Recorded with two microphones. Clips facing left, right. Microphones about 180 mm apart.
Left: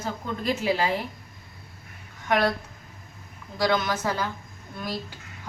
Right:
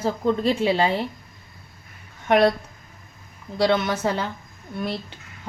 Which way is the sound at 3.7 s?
25° right (ahead or behind).